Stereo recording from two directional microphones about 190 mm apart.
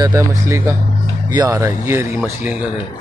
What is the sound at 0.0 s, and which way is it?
Speech, 15° right (ahead or behind).